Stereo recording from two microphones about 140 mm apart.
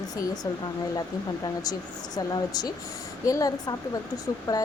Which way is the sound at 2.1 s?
30° left (ahead or behind).